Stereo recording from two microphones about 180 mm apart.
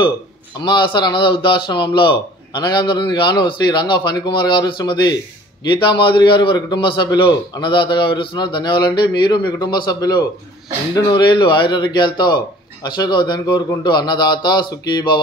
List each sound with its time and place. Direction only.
0.6 s a man's voice: 25° left (ahead or behind)